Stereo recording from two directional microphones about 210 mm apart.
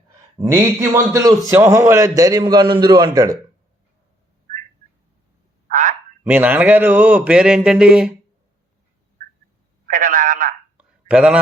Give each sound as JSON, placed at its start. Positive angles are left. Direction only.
{"t": 0.3, "sound": "a man's voice", "side_deg": -15}
{"t": 5.7, "sound": "frog", "side_deg": -35}
{"t": 6.2, "sound": "speech", "side_deg": -5}
{"t": 9.8, "sound": "telephone", "side_deg": -40}
{"t": 10.8, "sound": "a sound", "side_deg": -5}